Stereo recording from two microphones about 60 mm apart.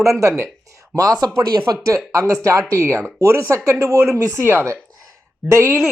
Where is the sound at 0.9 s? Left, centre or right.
Right.